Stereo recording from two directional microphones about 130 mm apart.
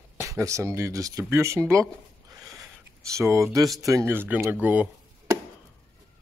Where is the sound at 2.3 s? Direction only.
25° right (ahead or behind).